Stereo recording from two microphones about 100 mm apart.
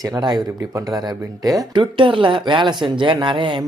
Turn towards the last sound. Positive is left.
turn(degrees=-55)  # may be behind; listen again after turning